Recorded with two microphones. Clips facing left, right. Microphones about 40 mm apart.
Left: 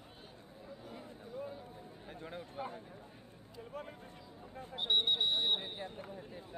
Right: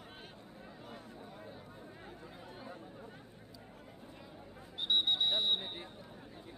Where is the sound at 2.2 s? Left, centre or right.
Left.